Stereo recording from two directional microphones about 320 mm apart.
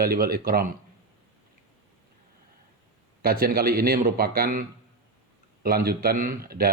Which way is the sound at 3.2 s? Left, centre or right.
Right.